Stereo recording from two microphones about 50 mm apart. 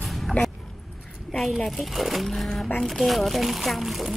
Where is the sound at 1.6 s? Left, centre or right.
Centre.